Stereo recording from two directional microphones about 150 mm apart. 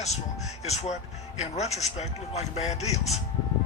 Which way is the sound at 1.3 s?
45° left (ahead or behind).